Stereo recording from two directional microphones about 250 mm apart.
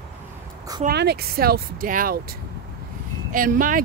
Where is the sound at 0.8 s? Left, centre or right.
Right.